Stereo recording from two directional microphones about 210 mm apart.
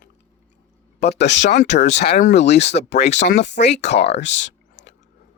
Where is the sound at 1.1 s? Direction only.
55° left (ahead or behind).